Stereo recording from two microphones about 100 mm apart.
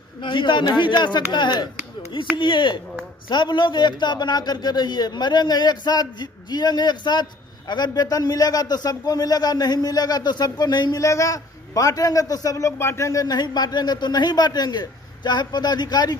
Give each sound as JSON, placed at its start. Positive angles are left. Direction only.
{"t": 0.2, "sound": "a man's voice", "side_deg": 55}